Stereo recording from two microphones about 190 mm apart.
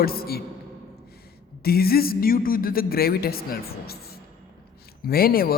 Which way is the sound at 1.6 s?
55° left (ahead or behind).